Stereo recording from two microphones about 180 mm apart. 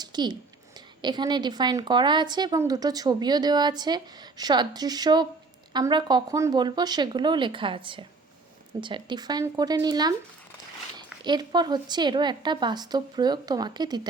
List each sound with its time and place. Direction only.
0.0 s a woman's voice: 25° right (ahead or behind)